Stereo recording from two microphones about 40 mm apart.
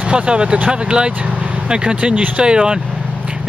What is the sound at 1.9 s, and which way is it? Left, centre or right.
Speech, right.